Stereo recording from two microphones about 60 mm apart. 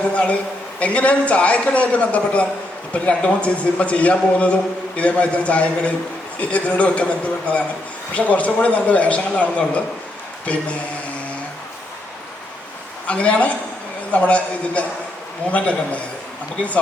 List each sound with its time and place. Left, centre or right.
0.1 s a man's voice: left
13.1 s a man's voice: left